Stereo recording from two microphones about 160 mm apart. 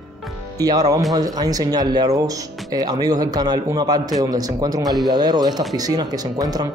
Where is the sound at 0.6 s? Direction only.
25° right (ahead or behind).